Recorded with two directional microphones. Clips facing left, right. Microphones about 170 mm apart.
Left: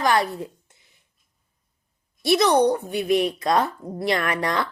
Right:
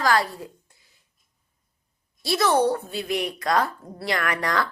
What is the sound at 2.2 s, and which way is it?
Speech, 20° left (ahead or behind).